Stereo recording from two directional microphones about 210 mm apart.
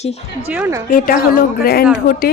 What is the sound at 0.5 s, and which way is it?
Speech, 10° right (ahead or behind).